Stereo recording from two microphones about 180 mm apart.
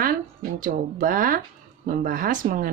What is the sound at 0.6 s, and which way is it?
Speech, 50° right (ahead or behind).